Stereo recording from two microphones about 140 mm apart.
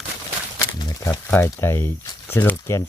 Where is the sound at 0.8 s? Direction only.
25° left (ahead or behind).